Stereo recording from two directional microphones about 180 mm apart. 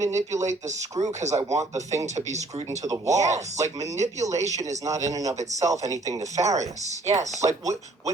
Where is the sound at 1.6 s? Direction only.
20° right (ahead or behind).